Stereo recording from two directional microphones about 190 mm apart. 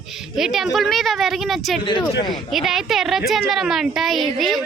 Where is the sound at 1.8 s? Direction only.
25° left (ahead or behind).